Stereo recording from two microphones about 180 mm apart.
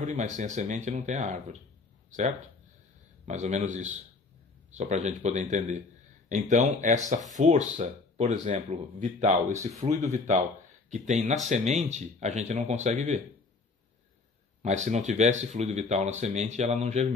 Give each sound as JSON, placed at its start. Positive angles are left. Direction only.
{"t": 0.0, "sound": "a man's voice", "side_deg": -40}
{"t": 14.6, "sound": "speech", "side_deg": -40}